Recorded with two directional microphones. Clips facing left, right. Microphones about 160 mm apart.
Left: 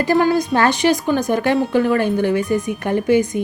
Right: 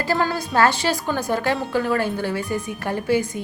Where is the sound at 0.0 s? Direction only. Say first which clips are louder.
Left 7 dB; 20° left (ahead or behind).